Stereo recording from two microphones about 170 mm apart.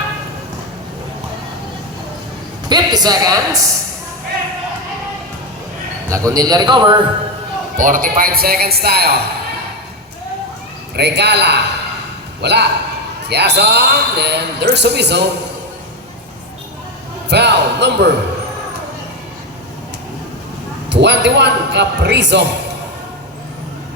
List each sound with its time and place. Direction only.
2.6 s a man's voice: 25° right (ahead or behind)
6.1 s a man's voice: 20° right (ahead or behind)
7.8 s speech: 50° right (ahead or behind); by 9.2 s 70° right (ahead or behind)
10.9 s a man's voice: 80° right
17.2 s a man's voice: 90° right
20.9 s a man's voice: 90° right